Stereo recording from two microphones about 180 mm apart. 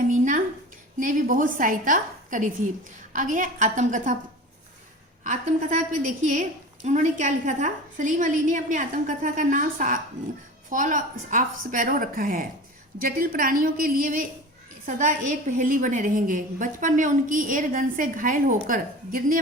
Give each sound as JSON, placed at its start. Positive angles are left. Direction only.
{"t": 0.1, "sound": "a sound", "side_deg": -45}
{"t": 0.9, "sound": "a woman's voice", "side_deg": -45}
{"t": 5.2, "sound": "a woman's voice", "side_deg": -45}